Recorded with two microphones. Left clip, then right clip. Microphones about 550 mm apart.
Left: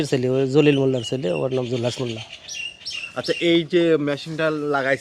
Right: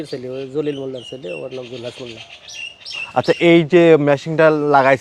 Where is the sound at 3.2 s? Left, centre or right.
Right; by 5.0 s centre.